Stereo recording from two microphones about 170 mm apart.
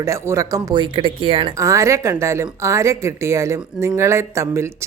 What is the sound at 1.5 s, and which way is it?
Speech, 20° right (ahead or behind).